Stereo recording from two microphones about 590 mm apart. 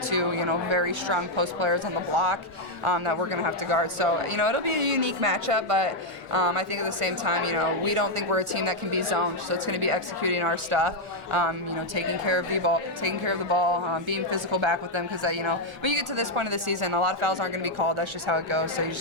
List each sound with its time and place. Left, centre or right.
0.1 s a woman's voice: right